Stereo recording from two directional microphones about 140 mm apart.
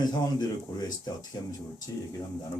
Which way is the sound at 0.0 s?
30° left (ahead or behind).